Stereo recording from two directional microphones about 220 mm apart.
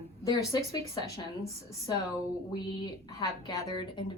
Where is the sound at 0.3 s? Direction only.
15° left (ahead or behind).